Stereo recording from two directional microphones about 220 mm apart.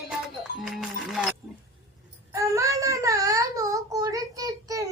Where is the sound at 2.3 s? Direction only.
15° right (ahead or behind).